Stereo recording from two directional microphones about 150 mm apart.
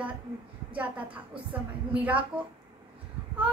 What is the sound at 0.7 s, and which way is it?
A woman's voice, 10° right (ahead or behind).